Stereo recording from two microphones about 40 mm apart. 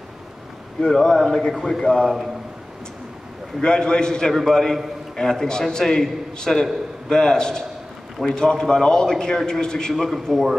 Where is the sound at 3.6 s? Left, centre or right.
Left.